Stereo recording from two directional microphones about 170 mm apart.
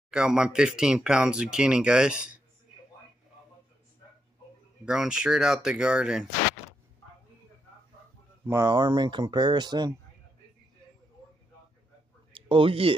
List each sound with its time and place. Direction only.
0.1 s speech: 5° right (ahead or behind)
4.8 s speech: 5° right (ahead or behind)
8.5 s speech: 20° right (ahead or behind)
12.4 s speech: 30° right (ahead or behind)